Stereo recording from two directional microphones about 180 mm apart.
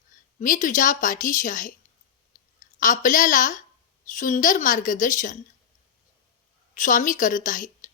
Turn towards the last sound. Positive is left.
turn(degrees=45)  # may be behind; listen again after turning